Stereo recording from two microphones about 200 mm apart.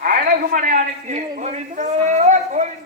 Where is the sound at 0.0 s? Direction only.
50° right (ahead or behind).